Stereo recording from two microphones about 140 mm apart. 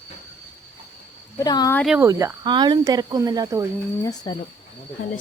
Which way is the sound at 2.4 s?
30° right (ahead or behind).